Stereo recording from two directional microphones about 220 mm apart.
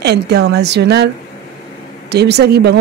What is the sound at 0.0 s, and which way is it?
Speech, 50° right (ahead or behind).